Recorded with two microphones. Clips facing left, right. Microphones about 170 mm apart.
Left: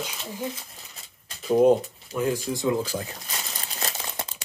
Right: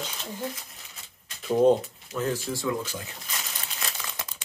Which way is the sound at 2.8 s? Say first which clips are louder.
Left 6 dB; 35° left (ahead or behind).